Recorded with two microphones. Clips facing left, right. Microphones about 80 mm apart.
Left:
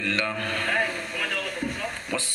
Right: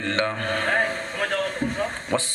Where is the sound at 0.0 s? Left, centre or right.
Right.